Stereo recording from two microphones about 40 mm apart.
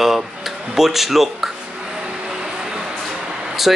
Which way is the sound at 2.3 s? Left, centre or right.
Centre.